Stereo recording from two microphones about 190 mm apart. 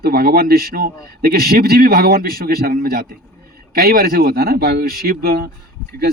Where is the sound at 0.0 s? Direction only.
55° right (ahead or behind).